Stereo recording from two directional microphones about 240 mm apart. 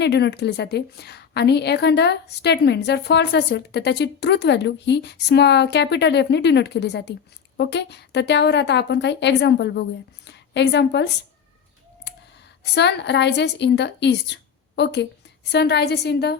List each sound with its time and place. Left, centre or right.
0.0 s a woman's voice: left
12.7 s a woman's voice: left